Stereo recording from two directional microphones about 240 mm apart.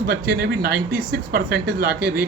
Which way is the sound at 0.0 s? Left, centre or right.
Right.